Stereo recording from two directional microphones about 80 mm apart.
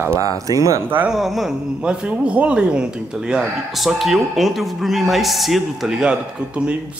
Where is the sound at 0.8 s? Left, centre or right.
Right.